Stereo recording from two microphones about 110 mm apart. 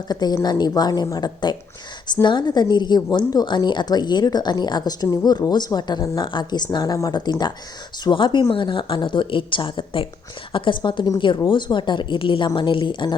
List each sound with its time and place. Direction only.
0.1 s a woman's voice: 40° left (ahead or behind)